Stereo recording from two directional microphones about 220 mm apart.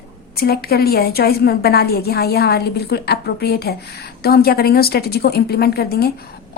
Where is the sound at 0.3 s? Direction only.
45° left (ahead or behind).